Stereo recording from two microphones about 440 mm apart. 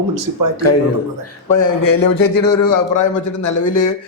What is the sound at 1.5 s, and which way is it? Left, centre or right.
A man's voice, left.